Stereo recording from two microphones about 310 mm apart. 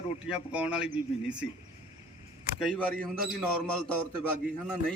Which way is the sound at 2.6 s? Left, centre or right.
Centre.